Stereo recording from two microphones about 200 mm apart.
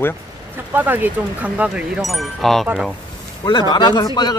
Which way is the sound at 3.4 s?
20° left (ahead or behind).